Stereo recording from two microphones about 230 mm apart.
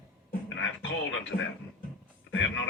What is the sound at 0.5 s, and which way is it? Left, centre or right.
Music, left.